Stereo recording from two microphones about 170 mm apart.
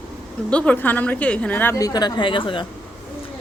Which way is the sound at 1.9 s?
25° left (ahead or behind).